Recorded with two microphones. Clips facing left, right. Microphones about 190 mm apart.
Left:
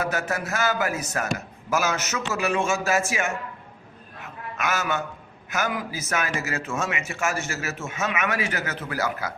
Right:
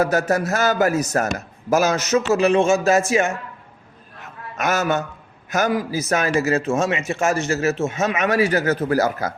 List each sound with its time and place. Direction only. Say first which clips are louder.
0.0 s speech: right 8 dB; 40° right (ahead or behind)
4.5 s speech: right 6 dB; 40° right (ahead or behind)